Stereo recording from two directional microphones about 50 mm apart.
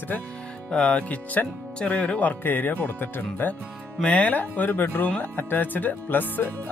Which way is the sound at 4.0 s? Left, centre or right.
Left.